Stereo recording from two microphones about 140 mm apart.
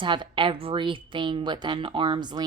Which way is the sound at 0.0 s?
35° right (ahead or behind).